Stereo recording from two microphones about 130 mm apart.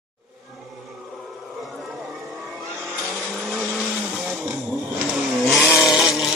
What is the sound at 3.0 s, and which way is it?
Vehicle, 5° right (ahead or behind).